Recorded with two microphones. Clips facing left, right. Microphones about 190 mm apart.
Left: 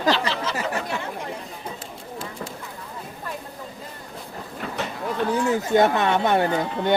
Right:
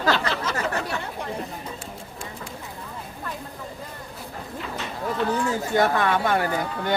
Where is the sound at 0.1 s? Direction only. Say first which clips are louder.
Left 2 dB; 50° right (ahead or behind).